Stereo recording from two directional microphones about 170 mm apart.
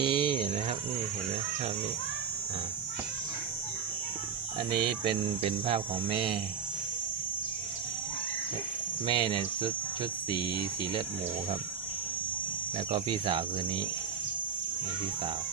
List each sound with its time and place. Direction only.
0.0 s insect: 30° right (ahead or behind)
4.7 s speech: 30° right (ahead or behind)
9.0 s speech: 30° right (ahead or behind)
12.9 s speech: 30° right (ahead or behind)